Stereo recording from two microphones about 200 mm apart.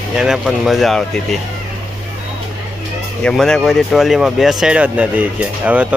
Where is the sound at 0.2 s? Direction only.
Centre (ahead or behind).